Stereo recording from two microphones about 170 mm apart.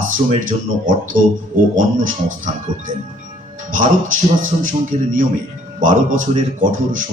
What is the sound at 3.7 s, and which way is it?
A man's voice, 50° right (ahead or behind).